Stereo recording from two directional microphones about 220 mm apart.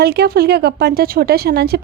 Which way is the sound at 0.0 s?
45° right (ahead or behind).